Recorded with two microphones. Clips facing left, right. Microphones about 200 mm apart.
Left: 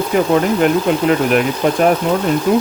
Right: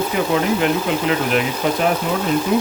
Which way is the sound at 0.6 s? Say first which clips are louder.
Left 5 dB; 50° left (ahead or behind).